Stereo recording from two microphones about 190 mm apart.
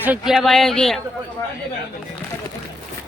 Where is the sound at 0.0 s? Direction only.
5° right (ahead or behind).